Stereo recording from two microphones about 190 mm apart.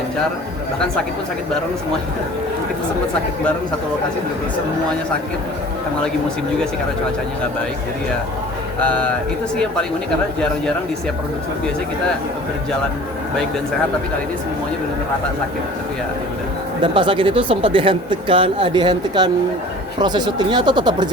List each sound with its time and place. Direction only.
8.8 s speech: 5° left (ahead or behind)
16.8 s speech: 25° right (ahead or behind)